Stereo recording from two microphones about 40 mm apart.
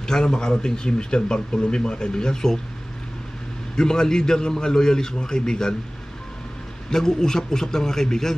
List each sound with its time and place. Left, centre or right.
0.0 s speech: centre
3.7 s a man's voice: centre
6.9 s a man's voice: centre